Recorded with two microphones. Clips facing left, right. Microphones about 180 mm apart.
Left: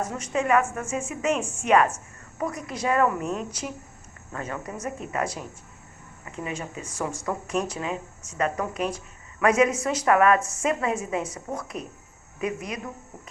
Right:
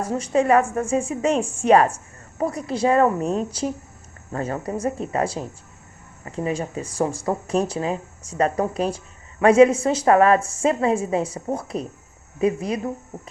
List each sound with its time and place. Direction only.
0.0 s speech: 35° right (ahead or behind)